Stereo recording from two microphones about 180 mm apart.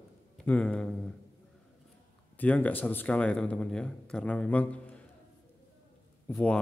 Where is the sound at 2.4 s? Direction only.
10° left (ahead or behind).